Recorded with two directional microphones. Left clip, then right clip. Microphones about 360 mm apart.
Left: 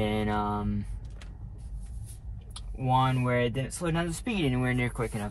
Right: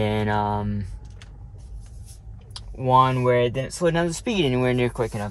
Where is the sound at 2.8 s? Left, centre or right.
Right.